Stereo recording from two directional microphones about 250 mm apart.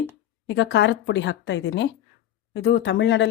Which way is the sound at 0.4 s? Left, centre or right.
Left.